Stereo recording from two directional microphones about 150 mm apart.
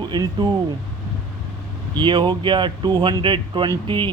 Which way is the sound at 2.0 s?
30° right (ahead or behind).